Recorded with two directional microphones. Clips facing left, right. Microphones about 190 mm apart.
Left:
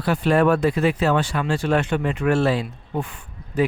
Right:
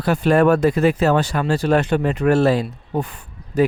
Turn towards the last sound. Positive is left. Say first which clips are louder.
# right 4 dB
turn(degrees=-40)  # may be behind; listen again after turning